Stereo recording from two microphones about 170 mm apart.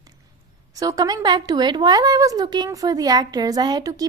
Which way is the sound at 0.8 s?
20° right (ahead or behind).